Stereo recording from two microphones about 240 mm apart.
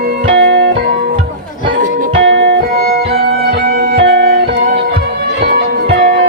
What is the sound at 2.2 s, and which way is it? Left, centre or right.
Music, right.